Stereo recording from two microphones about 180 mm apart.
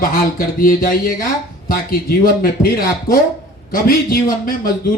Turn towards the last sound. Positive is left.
turn(degrees=55)  # may be behind; listen again after turning